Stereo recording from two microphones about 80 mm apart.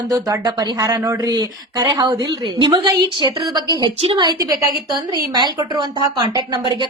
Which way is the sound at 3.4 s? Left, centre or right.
Right.